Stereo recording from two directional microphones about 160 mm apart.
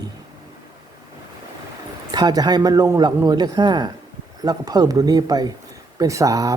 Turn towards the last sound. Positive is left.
turn(degrees=-20)  # may be behind; listen again after turning